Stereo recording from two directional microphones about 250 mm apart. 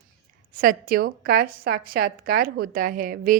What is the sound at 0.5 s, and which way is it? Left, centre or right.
A woman's voice, right.